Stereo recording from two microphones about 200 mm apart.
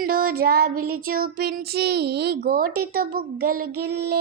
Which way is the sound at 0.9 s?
45° right (ahead or behind).